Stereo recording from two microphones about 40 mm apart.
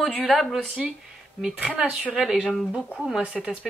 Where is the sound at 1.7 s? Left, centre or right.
Right.